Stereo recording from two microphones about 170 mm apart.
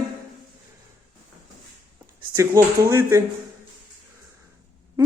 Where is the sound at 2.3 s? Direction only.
15° right (ahead or behind).